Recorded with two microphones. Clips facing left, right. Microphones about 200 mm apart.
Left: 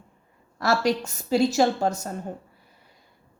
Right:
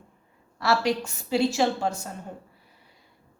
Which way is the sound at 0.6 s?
45° left (ahead or behind).